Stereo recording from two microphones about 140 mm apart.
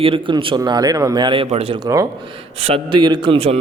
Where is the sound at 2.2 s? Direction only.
40° right (ahead or behind).